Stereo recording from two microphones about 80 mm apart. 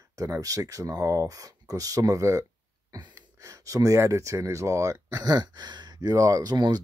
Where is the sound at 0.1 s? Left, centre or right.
Right.